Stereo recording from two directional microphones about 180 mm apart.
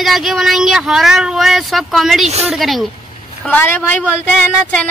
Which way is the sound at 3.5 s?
10° left (ahead or behind).